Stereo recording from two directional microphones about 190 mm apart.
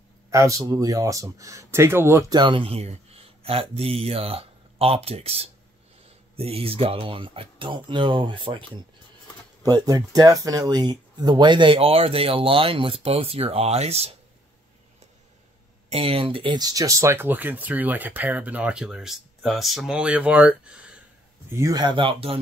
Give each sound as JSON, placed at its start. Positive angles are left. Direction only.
{"t": 0.3, "sound": "speech", "side_deg": -15}
{"t": 15.9, "sound": "speech", "side_deg": -30}
{"t": 21.5, "sound": "speech", "side_deg": -15}